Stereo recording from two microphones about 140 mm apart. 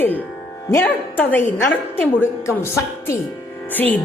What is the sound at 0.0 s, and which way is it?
A woman's voice, 10° left (ahead or behind).